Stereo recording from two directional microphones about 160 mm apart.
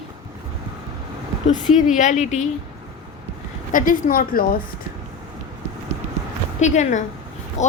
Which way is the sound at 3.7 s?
60° left (ahead or behind).